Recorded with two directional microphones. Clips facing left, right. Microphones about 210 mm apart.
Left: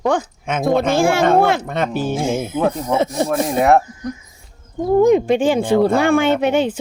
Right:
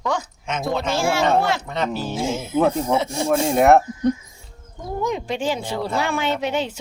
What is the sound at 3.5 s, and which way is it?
Speech, centre (ahead or behind).